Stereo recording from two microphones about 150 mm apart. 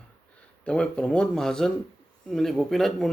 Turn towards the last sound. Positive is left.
turn(degrees=0)  # may be behind; listen again after turning